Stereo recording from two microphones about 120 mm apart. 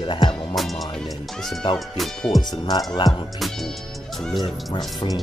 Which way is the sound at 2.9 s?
35° left (ahead or behind).